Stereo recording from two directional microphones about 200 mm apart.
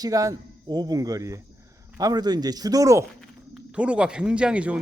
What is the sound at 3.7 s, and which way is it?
A man's voice, 5° right (ahead or behind).